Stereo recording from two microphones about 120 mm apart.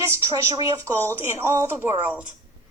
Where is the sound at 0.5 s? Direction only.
30° right (ahead or behind); by 2.2 s 10° right (ahead or behind).